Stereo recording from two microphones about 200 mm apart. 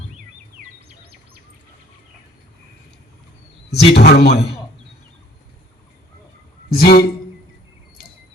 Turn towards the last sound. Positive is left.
turn(degrees=50)  # may be behind; listen again after turning